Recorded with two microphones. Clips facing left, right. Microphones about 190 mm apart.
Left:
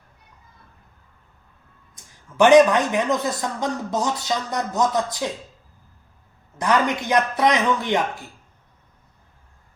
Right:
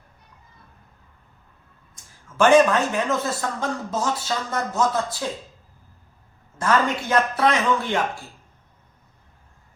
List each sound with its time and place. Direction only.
2.4 s speech: 15° left (ahead or behind)
6.6 s speech: 15° left (ahead or behind)